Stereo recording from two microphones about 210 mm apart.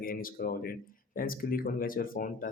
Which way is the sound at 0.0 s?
40° left (ahead or behind).